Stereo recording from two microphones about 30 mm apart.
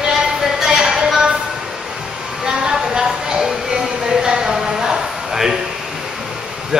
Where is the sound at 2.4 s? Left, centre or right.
Right.